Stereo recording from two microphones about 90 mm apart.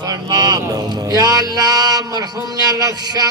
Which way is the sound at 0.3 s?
45° right (ahead or behind).